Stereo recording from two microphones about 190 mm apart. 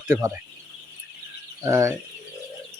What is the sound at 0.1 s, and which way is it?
Speech, 15° right (ahead or behind).